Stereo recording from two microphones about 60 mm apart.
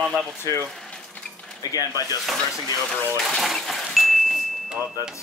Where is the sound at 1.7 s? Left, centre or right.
Left.